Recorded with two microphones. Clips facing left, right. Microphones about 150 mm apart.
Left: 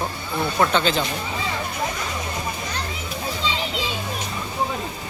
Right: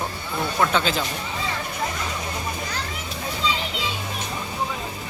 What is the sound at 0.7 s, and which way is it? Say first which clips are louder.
Speech: left 2 dB; 5° right (ahead or behind).